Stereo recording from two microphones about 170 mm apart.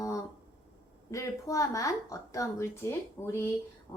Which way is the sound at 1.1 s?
20° left (ahead or behind).